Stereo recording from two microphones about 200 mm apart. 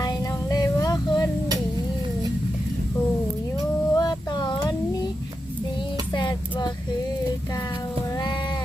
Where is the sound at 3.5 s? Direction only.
20° left (ahead or behind).